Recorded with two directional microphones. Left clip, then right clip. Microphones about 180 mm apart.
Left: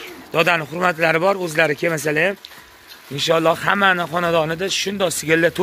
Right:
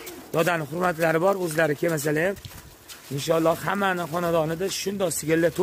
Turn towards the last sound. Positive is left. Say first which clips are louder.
# left 6 dB
turn(degrees=-10)  # may be behind; listen again after turning